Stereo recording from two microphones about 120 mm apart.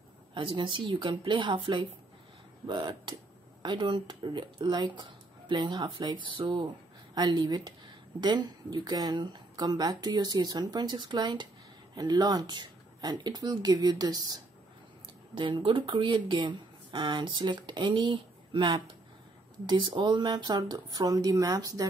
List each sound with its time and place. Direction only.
0.3 s speech: 45° right (ahead or behind)
2.6 s speech: 40° right (ahead or behind)